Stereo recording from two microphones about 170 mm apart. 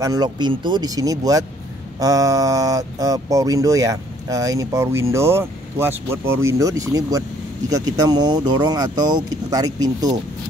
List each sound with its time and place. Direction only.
0.0 s speech: 25° right (ahead or behind)